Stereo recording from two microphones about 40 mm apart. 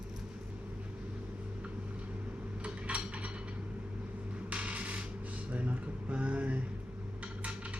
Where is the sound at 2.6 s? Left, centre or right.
Right.